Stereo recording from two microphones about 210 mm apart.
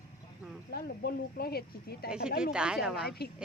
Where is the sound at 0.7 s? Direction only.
45° left (ahead or behind).